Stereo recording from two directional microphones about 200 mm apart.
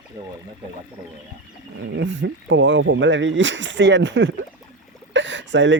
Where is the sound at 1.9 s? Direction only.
65° right (ahead or behind).